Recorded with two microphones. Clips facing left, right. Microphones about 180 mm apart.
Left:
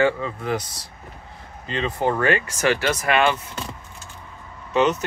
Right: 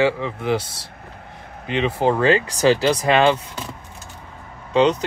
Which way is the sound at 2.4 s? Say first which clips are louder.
Right 5 dB; 35° right (ahead or behind).